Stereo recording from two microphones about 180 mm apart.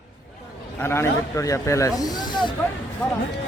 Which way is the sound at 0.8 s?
15° left (ahead or behind).